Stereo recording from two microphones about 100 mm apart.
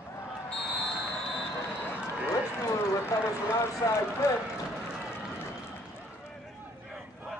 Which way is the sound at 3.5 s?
25° left (ahead or behind).